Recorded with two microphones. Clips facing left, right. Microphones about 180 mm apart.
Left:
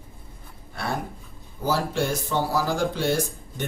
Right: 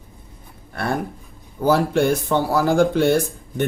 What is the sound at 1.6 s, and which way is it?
Speech, 60° right (ahead or behind).